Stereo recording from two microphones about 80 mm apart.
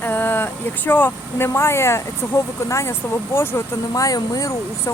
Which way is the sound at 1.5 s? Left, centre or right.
Left.